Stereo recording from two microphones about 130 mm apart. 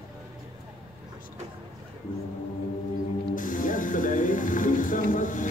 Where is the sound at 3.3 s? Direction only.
90° left.